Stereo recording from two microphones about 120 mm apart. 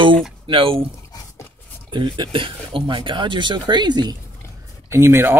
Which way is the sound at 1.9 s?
40° right (ahead or behind).